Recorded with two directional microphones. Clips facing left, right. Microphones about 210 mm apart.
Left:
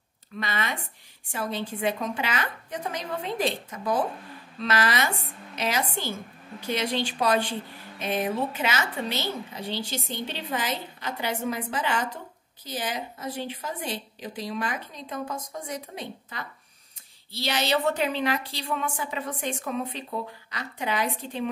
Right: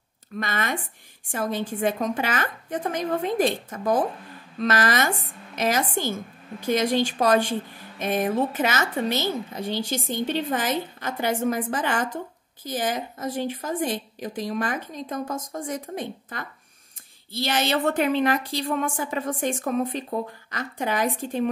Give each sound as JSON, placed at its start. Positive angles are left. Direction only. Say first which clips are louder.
{"t": 0.4, "sound": "a woman's voice", "louder": "right 3 dB", "side_deg": -50}